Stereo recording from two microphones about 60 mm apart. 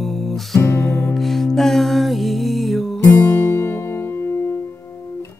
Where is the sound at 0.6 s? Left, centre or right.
Left.